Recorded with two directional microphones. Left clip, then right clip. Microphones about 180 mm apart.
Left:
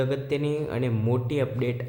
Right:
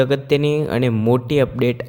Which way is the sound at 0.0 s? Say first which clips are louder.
Right 10 dB; 50° right (ahead or behind).